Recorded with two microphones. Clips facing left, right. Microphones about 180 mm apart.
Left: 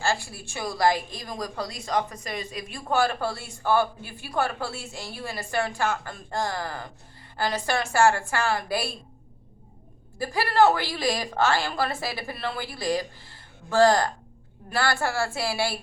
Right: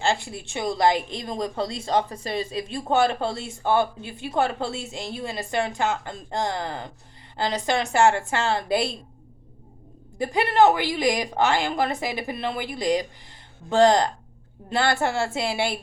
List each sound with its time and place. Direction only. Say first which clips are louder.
0.0 s a woman's voice: right 3 dB; 20° right (ahead or behind)
10.2 s a woman's voice: right 2 dB; 20° right (ahead or behind)